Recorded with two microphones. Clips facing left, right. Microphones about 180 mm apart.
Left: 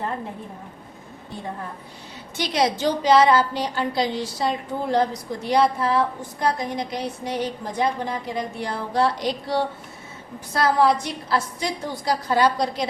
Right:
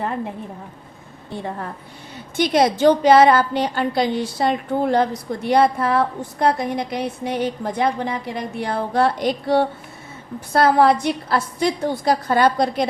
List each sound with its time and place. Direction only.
2.3 s a woman's voice: 50° right (ahead or behind)